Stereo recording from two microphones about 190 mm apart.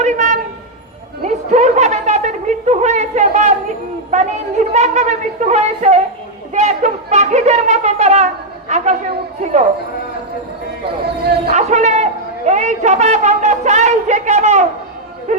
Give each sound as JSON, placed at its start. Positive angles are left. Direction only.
{"t": 0.0, "sound": "a sound", "side_deg": -40}
{"t": 4.1, "sound": "a woman's voice", "side_deg": -40}
{"t": 11.5, "sound": "a woman's voice", "side_deg": -35}